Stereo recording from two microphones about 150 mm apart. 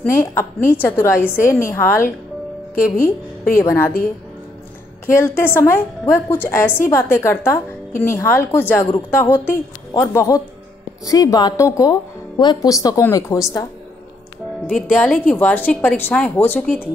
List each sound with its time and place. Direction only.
0.1 s a woman's voice: 15° left (ahead or behind)
5.0 s a woman's voice: 15° left (ahead or behind)
14.9 s a woman's voice: 10° left (ahead or behind)